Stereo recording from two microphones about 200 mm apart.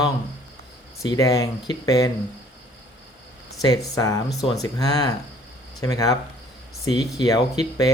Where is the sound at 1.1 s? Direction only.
15° left (ahead or behind).